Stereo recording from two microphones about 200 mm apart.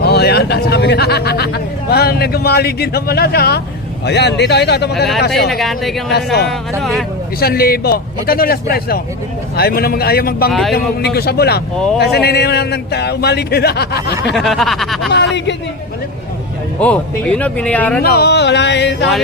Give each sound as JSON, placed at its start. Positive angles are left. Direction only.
{"t": 0.0, "sound": "a man's voice", "side_deg": 55}
{"t": 5.5, "sound": "speech", "side_deg": 0}
{"t": 6.1, "sound": "speech", "side_deg": 55}
{"t": 6.7, "sound": "speech", "side_deg": 0}
{"t": 7.3, "sound": "speech", "side_deg": 50}
{"t": 10.5, "sound": "speech", "side_deg": 0}
{"t": 10.8, "sound": "a man's voice", "side_deg": 55}
{"t": 14.3, "sound": "speech", "side_deg": 0}
{"t": 16.8, "sound": "speech", "side_deg": 5}
{"t": 18.0, "sound": "a man's voice", "side_deg": 50}